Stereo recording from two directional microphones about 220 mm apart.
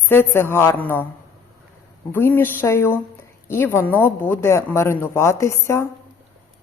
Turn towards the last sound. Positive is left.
turn(degrees=10)  # may be behind; listen again after turning